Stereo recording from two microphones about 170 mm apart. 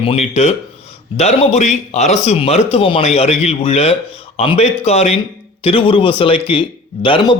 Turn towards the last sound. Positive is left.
turn(degrees=30)  # may be behind; listen again after turning